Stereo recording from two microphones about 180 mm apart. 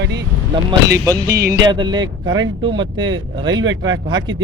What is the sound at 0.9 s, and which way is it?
Speech, 20° right (ahead or behind).